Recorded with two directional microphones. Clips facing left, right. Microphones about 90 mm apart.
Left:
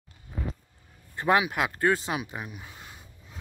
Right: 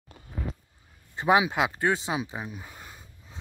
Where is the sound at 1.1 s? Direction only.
20° right (ahead or behind).